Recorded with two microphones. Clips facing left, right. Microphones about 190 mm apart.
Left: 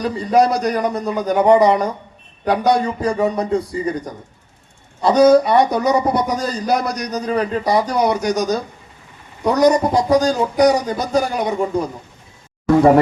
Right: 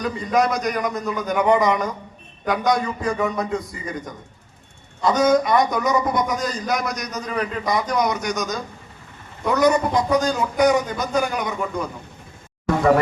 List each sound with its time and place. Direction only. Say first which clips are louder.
0.0 s a man's voice: left 5 dB; 35° left (ahead or behind)